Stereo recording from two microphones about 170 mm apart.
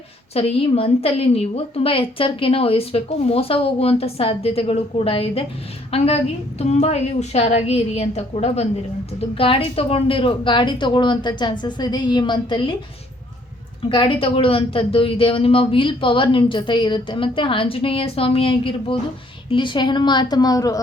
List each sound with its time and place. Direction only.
0.3 s a woman's voice: 35° left (ahead or behind)
13.8 s a woman's voice: 30° left (ahead or behind)